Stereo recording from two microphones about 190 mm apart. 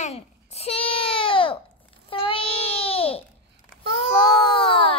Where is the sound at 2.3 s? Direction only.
30° left (ahead or behind).